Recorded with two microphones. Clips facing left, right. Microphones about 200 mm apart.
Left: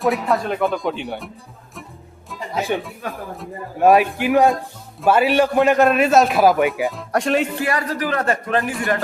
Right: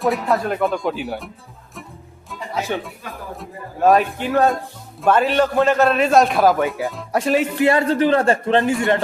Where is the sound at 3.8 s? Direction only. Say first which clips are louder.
Left 1 dB; 10° left (ahead or behind).